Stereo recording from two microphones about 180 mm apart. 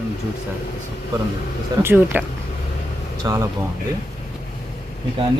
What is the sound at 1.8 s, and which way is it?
Speech, 15° right (ahead or behind).